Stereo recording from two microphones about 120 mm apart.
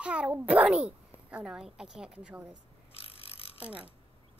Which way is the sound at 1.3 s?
5° right (ahead or behind).